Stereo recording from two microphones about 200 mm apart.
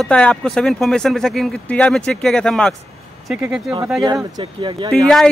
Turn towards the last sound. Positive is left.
turn(degrees=0)  # may be behind; listen again after turning